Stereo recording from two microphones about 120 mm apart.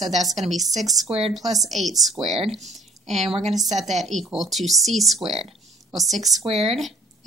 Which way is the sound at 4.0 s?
Centre (ahead or behind).